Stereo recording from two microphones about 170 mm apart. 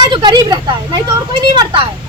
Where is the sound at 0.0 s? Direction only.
25° right (ahead or behind).